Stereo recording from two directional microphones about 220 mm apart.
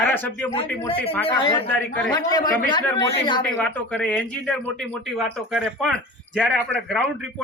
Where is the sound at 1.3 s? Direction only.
20° left (ahead or behind).